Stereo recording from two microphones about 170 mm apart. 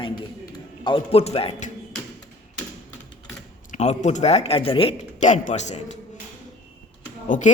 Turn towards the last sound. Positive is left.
turn(degrees=45)  # may be behind; listen again after turning